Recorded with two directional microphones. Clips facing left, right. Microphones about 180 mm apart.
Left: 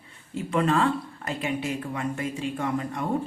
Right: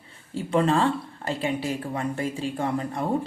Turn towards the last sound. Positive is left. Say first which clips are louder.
# right 1 dB
turn(degrees=-35)  # may be behind; listen again after turning